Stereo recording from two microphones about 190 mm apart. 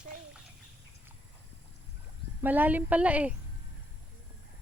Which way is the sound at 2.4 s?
10° right (ahead or behind).